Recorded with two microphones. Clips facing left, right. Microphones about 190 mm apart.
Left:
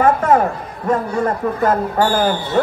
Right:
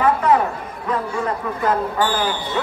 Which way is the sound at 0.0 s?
50° left (ahead or behind).